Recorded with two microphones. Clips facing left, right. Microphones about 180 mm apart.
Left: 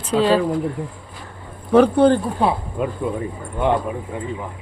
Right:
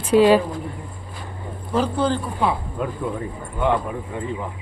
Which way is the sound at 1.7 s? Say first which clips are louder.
Left 8 dB; 60° left (ahead or behind).